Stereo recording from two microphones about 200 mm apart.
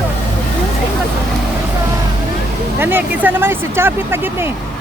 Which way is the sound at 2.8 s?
10° right (ahead or behind).